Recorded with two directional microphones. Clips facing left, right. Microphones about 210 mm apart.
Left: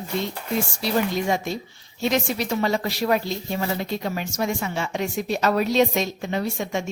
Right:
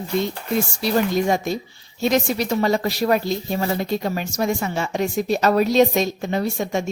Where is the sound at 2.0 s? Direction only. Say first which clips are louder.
Right 3 dB; 40° right (ahead or behind).